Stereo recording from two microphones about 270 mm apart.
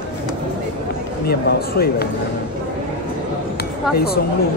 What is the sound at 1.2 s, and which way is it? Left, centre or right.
Speech, left.